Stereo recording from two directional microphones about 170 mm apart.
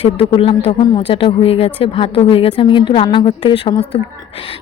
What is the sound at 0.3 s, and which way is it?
A woman's voice, 35° left (ahead or behind).